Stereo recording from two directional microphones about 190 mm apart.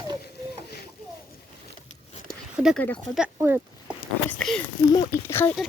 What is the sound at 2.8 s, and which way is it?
Speech, 10° left (ahead or behind).